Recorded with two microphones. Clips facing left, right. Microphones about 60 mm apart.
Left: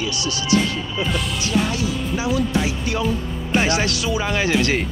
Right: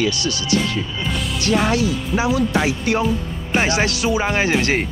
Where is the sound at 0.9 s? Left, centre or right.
Centre.